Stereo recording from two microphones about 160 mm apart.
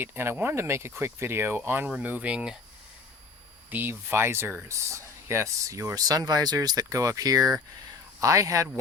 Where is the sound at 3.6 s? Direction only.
10° right (ahead or behind).